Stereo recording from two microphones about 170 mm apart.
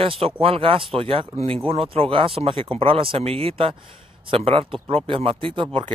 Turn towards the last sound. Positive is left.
turn(degrees=-30)  # may be behind; listen again after turning